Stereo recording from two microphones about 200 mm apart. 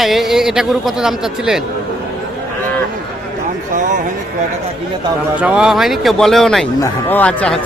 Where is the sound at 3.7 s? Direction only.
40° right (ahead or behind).